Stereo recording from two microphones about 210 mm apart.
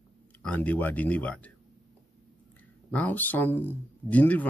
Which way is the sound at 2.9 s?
5° left (ahead or behind).